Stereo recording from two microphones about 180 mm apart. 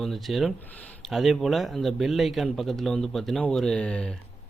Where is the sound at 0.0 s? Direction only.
Centre (ahead or behind).